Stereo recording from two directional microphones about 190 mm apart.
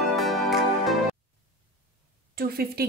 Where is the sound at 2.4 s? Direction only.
50° right (ahead or behind).